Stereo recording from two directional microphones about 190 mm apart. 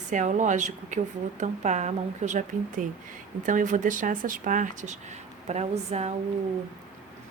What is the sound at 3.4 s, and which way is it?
Speech, 40° right (ahead or behind).